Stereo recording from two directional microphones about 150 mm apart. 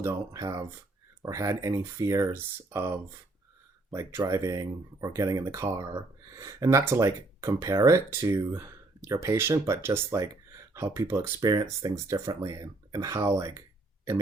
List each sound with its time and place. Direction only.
0.0 s speech: 20° right (ahead or behind)